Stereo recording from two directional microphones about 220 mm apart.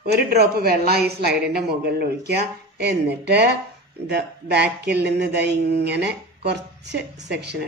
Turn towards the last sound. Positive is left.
turn(degrees=-50)  # may be behind; listen again after turning